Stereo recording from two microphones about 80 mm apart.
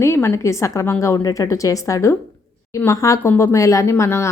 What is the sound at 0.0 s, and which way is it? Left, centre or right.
Speech, left.